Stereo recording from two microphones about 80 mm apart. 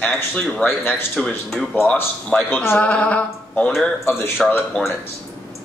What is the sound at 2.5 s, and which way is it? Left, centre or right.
Speech, left.